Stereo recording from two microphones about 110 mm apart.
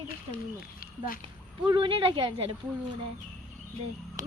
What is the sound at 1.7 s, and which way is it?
Speech, 50° right (ahead or behind).